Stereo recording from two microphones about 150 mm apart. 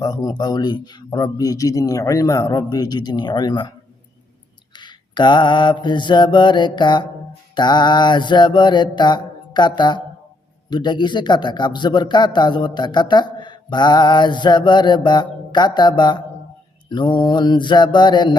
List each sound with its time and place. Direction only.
0.0 s a man's voice: 25° left (ahead or behind)
4.7 s mantra: 30° left (ahead or behind)
7.5 s a man's voice: 30° left (ahead or behind)
16.9 s mantra: 30° left (ahead or behind)